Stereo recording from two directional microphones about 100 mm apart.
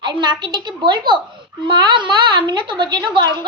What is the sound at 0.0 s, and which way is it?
A child's voice, 50° right (ahead or behind).